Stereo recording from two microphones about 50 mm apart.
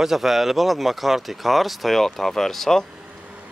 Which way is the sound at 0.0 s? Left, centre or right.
Centre.